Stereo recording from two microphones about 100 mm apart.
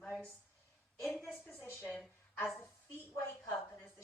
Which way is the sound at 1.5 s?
20° left (ahead or behind).